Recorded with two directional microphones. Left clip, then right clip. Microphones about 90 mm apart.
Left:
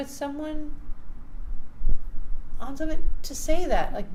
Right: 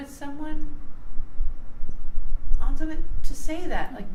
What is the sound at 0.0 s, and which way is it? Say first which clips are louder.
Speech: left 5 dB; 40° left (ahead or behind).